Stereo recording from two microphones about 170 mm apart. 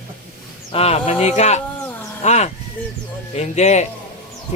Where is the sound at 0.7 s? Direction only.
35° left (ahead or behind).